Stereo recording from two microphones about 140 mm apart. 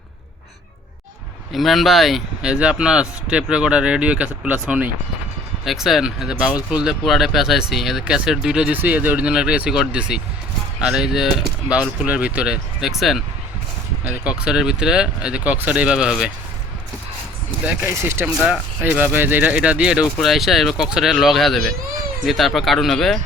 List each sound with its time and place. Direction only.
1.5 s speech: centre (ahead or behind)
17.7 s speech: 15° right (ahead or behind); by 23.1 s centre (ahead or behind)